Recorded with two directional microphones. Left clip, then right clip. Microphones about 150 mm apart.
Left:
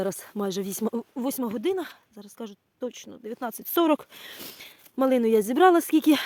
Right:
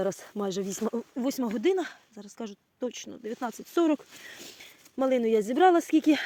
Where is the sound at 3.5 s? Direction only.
45° left (ahead or behind); by 4.6 s 60° left (ahead or behind).